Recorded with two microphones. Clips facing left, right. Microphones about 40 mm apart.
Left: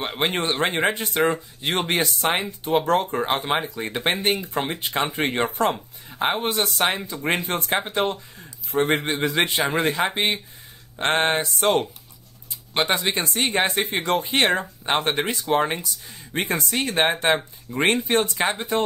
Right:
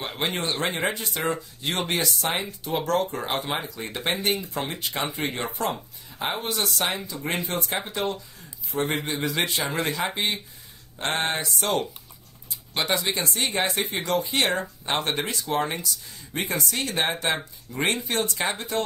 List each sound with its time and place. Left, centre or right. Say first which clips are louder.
0.0 s speech: left 4 dB; left
5.1 s speech: left 6 dB; left
12.8 s speech: left 2 dB; left
14.6 s speech: left 4 dB; left